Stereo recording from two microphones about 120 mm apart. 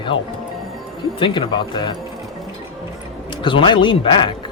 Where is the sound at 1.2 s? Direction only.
45° left (ahead or behind).